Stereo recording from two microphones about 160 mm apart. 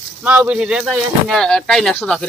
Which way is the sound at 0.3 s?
10° right (ahead or behind).